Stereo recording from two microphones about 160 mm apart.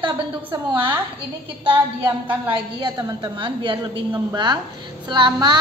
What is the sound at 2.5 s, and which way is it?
A woman's voice, 25° right (ahead or behind).